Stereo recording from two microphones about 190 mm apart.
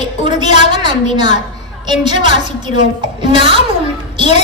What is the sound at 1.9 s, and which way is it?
A woman's voice, 25° right (ahead or behind).